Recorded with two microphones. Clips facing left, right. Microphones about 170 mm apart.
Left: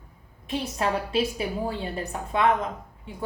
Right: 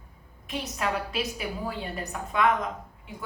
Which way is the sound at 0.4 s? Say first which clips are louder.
Left 3 dB; 30° left (ahead or behind).